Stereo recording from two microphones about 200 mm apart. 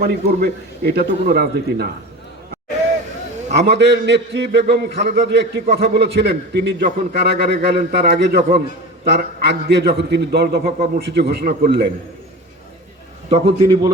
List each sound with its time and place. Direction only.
0.0 s a man's voice: 50° right (ahead or behind)
3.5 s a man's voice: 55° right (ahead or behind)
8.4 s a man's voice: 40° right (ahead or behind)
9.0 s a man's voice: 55° right (ahead or behind)
13.3 s a man's voice: 30° right (ahead or behind)